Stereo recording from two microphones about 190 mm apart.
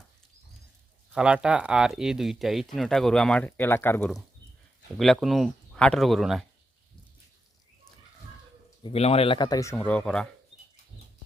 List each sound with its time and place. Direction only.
1.1 s speech: 5° right (ahead or behind); by 4.1 s 10° left (ahead or behind)
4.9 s speech: centre (ahead or behind)
8.8 s speech: 30° left (ahead or behind); by 10.2 s 5° left (ahead or behind)